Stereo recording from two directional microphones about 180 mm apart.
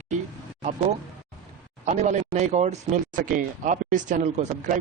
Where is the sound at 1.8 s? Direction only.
40° right (ahead or behind).